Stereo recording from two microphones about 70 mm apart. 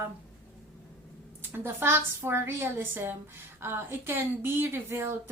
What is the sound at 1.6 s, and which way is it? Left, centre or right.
Speech, right.